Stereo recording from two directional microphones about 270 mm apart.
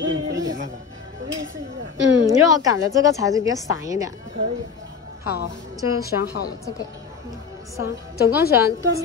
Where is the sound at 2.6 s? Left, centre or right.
Centre.